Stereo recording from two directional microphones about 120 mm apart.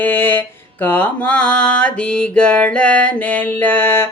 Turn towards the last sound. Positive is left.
turn(degrees=20)  # may be behind; listen again after turning